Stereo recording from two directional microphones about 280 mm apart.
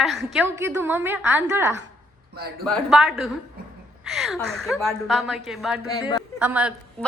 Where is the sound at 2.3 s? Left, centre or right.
Right.